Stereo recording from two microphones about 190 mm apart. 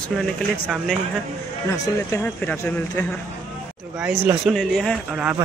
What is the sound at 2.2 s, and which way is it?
Speech, 10° left (ahead or behind).